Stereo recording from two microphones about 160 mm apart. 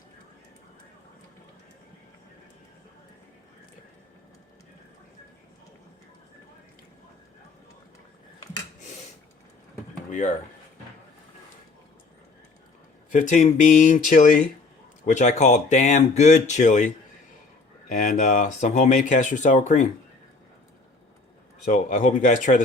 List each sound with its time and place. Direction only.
10.1 s a sound: 50° left (ahead or behind)
13.1 s speech: 55° left (ahead or behind)
21.6 s speech: 55° left (ahead or behind)